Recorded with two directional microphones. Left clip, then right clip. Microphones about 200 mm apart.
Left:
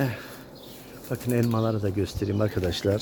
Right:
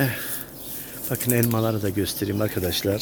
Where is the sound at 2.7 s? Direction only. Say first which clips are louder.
Right 2 dB; 20° left (ahead or behind).